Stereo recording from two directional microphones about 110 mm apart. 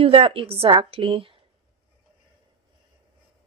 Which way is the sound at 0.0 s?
55° right (ahead or behind).